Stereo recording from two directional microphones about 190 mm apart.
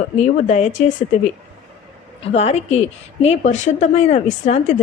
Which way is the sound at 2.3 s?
35° left (ahead or behind).